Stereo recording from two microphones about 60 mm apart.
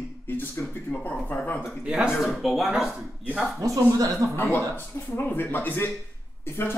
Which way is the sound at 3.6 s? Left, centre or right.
Right.